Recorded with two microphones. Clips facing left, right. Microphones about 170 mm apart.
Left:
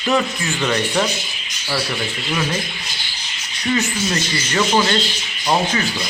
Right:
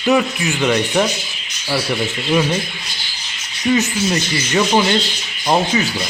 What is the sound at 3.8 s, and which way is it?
Speech, 15° right (ahead or behind).